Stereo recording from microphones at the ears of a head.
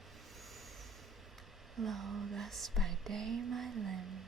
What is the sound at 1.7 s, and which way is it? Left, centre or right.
Speech, right.